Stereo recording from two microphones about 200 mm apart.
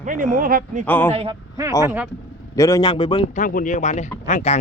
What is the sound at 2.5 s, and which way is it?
Speech, 15° left (ahead or behind).